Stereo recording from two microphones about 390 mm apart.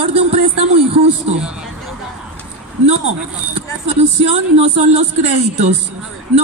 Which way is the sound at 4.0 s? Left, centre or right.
Centre.